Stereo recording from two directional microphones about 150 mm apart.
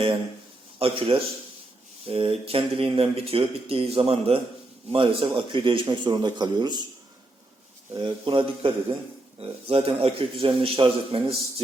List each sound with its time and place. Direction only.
0.8 s a man's voice: 35° right (ahead or behind)
7.9 s a man's voice: 35° right (ahead or behind)